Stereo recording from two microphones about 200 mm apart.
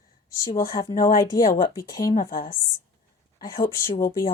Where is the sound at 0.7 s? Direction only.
15° left (ahead or behind).